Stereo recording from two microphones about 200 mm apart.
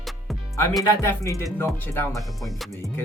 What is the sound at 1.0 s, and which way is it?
Speech, 15° left (ahead or behind).